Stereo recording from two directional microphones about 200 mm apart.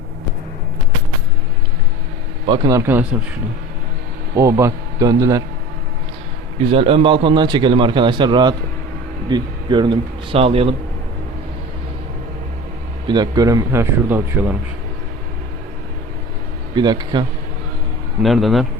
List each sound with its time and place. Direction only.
2.5 s speech: 15° right (ahead or behind)
4.4 s speech: 15° right (ahead or behind)
6.6 s a man's voice: 30° right (ahead or behind)
13.1 s speech: 20° right (ahead or behind)
16.7 s a man's voice: 20° right (ahead or behind)
18.2 s a man's voice: centre (ahead or behind)